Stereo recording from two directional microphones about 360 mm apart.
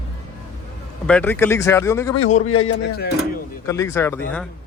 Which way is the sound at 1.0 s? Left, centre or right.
Centre.